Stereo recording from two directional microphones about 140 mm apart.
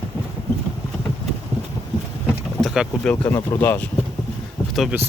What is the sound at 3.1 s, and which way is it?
Speech, 10° left (ahead or behind).